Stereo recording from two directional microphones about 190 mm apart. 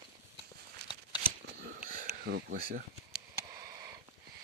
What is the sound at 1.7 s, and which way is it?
Wheeze, 50° right (ahead or behind).